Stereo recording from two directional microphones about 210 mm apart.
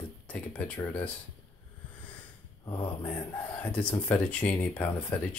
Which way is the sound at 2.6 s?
25° left (ahead or behind).